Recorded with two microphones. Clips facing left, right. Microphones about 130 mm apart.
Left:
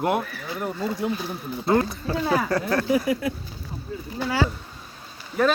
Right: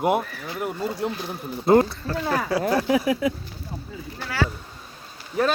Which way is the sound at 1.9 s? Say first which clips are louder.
Left 2 dB; 10° left (ahead or behind).